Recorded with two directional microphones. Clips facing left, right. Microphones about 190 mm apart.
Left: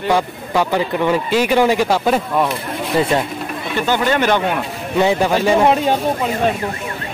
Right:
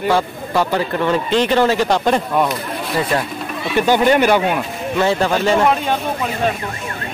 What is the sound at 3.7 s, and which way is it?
Speech, 15° right (ahead or behind).